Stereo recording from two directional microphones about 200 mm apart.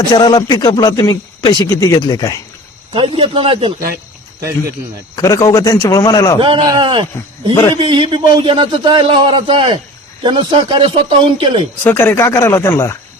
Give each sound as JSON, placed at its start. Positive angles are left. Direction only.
{"t": 0.1, "sound": "a man's voice", "side_deg": 20}
{"t": 2.9, "sound": "a man's voice", "side_deg": -25}
{"t": 5.1, "sound": "a man's voice", "side_deg": 15}
{"t": 6.4, "sound": "a man's voice", "side_deg": -25}
{"t": 11.8, "sound": "a man's voice", "side_deg": 10}